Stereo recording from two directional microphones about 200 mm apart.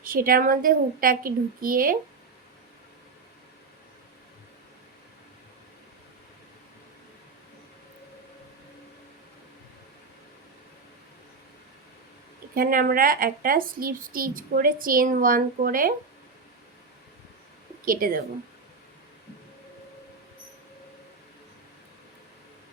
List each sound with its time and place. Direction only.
0.0 s speech: 45° right (ahead or behind)
12.5 s speech: 45° right (ahead or behind)
17.8 s speech: 45° right (ahead or behind)